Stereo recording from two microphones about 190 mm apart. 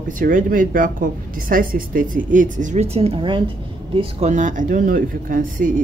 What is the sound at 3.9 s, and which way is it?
Speech, 35° right (ahead or behind).